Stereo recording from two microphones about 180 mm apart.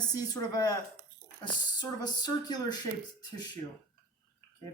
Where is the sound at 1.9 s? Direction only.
20° left (ahead or behind).